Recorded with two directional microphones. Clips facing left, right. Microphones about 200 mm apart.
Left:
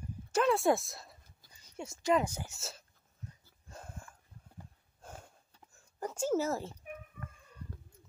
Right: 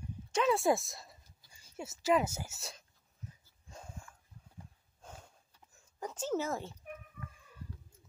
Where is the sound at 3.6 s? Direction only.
5° left (ahead or behind).